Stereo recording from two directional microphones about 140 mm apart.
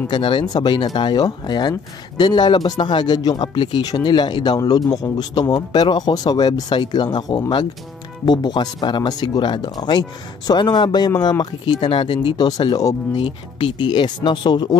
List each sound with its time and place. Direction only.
0.1 s speech: 35° left (ahead or behind)
13.2 s speech: 40° left (ahead or behind)